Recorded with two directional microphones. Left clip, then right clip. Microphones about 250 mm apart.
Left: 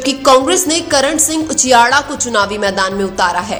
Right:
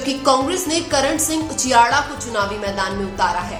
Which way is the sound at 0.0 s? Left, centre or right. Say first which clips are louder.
Left 7 dB; left.